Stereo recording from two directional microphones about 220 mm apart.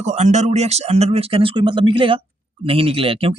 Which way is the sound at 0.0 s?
30° right (ahead or behind).